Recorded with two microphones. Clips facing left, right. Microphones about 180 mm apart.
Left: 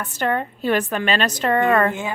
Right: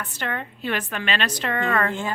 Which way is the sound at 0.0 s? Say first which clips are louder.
Left 8 dB; 40° left (ahead or behind).